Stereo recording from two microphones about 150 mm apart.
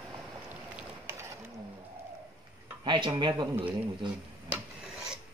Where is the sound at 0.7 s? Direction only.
20° right (ahead or behind).